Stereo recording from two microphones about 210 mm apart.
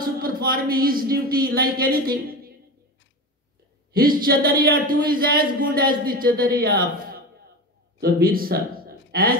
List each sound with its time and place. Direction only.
0.0 s speech: 45° right (ahead or behind)
3.9 s speech: 45° right (ahead or behind)
8.0 s speech: 45° right (ahead or behind)